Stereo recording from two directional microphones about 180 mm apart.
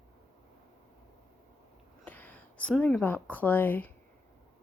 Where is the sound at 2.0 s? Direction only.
10° left (ahead or behind).